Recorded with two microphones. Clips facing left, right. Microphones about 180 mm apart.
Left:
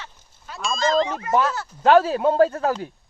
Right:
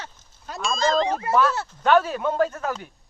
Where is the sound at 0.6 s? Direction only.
Centre (ahead or behind).